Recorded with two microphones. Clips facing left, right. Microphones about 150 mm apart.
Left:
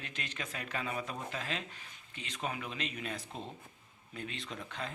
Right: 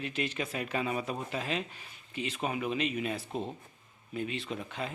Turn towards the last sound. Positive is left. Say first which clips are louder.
# right 5 dB
turn(degrees=-10)  # may be behind; listen again after turning